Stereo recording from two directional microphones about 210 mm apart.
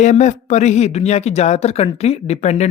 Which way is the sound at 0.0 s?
35° left (ahead or behind).